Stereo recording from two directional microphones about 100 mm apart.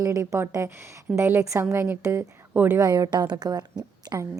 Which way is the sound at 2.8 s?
35° right (ahead or behind).